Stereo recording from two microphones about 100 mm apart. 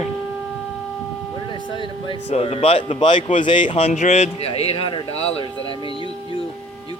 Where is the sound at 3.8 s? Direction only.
90° left.